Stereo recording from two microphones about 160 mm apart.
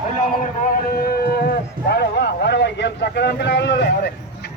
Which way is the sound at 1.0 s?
75° left (ahead or behind).